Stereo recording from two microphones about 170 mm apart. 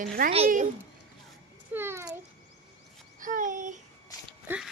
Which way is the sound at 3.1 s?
50° right (ahead or behind).